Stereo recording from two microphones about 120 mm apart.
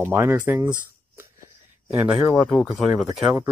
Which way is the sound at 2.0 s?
5° right (ahead or behind).